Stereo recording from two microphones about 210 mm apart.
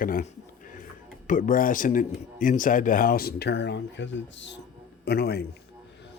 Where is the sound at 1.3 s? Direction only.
40° left (ahead or behind).